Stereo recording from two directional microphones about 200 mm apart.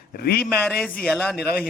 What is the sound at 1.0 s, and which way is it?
Speech, 5° left (ahead or behind).